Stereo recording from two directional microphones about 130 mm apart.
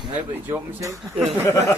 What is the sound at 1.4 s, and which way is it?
Speech, 20° left (ahead or behind).